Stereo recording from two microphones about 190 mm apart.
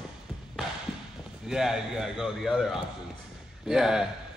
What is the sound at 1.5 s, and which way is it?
Speech, 5° right (ahead or behind).